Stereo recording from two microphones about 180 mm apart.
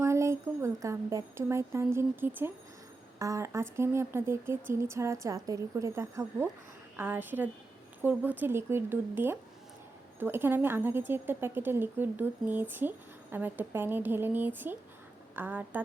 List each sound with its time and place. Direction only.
0.0 s a woman's voice: 15° right (ahead or behind)